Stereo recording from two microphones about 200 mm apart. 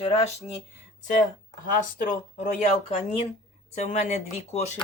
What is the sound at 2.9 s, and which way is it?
Speech, 35° left (ahead or behind).